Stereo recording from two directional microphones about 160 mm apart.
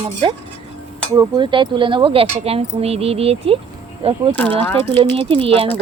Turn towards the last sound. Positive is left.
turn(degrees=-35)  # may be behind; listen again after turning